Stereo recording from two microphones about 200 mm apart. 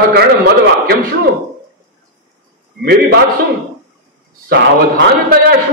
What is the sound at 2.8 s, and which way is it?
Speech, 55° right (ahead or behind).